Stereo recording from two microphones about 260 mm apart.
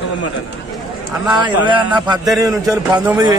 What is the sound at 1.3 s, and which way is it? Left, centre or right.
A man's voice, centre.